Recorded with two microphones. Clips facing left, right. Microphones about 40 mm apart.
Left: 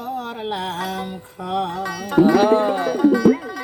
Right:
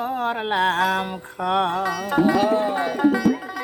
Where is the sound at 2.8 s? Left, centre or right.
Right.